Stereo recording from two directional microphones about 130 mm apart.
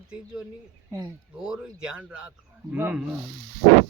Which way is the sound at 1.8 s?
5° right (ahead or behind).